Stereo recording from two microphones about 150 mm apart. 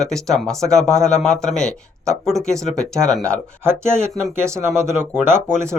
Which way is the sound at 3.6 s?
15° right (ahead or behind).